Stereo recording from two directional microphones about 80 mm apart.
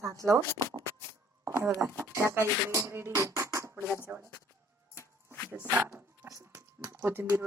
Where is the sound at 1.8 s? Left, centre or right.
Right.